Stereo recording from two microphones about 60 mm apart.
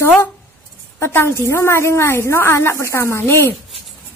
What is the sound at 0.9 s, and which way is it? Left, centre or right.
A woman's voice, left.